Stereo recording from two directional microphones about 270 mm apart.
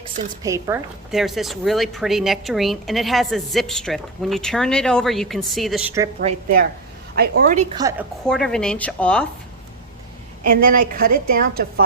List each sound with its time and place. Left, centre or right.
0.4 s a woman's voice: centre
1.1 s a woman's voice: centre
6.1 s a woman's voice: right
7.8 s a woman's voice: centre
8.3 s a woman's voice: centre
10.4 s a woman's voice: right